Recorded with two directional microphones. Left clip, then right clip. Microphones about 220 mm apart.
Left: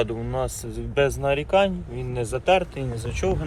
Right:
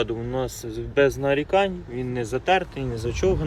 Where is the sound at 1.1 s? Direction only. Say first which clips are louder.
Even; 40° right (ahead or behind).